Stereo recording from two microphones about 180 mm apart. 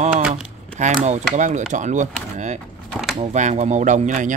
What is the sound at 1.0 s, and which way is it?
Speech, 40° right (ahead or behind).